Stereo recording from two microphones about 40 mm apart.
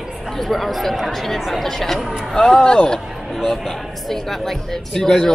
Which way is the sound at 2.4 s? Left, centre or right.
Centre.